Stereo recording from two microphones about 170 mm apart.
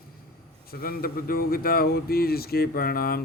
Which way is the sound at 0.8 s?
60° left (ahead or behind).